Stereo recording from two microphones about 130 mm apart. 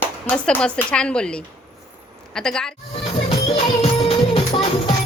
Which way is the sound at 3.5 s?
50° left (ahead or behind).